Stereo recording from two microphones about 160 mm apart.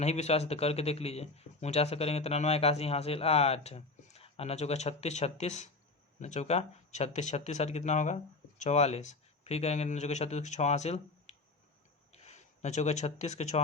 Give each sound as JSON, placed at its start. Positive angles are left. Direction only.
{"t": 0.0, "sound": "speech", "side_deg": 45}